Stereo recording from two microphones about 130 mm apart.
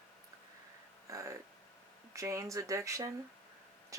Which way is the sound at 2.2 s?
25° right (ahead or behind).